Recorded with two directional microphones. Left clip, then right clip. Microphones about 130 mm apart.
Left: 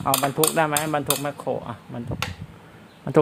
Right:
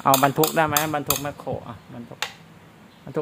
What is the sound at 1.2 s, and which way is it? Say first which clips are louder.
Speech: left 3 dB; 30° left (ahead or behind).